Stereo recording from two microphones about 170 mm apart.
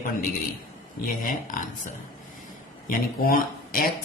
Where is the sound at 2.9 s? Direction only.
55° left (ahead or behind).